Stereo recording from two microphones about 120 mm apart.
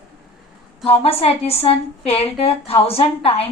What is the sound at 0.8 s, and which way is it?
A woman's voice, 55° left (ahead or behind).